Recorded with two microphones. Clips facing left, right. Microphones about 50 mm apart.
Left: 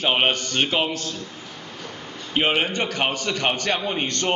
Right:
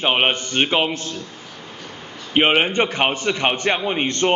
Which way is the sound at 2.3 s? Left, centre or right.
Right.